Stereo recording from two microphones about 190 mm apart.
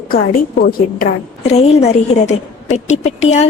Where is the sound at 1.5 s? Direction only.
35° left (ahead or behind).